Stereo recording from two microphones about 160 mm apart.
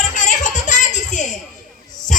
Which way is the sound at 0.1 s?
50° left (ahead or behind).